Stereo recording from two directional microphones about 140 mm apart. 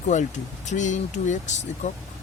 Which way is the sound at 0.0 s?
60° left (ahead or behind).